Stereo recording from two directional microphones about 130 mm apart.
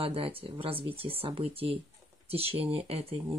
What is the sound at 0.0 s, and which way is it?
Speech, 45° right (ahead or behind).